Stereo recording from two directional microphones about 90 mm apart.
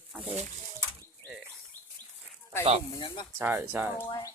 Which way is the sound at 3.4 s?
20° right (ahead or behind).